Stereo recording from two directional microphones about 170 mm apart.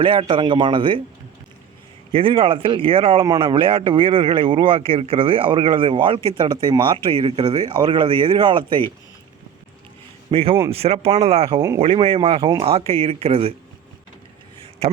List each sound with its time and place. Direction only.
0.0 s speech: 30° right (ahead or behind)
2.1 s a man's voice: 30° right (ahead or behind)
10.3 s a man's voice: 35° right (ahead or behind)